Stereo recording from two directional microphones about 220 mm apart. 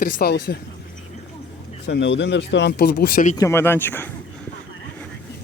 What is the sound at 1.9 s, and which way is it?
Speech, 55° left (ahead or behind).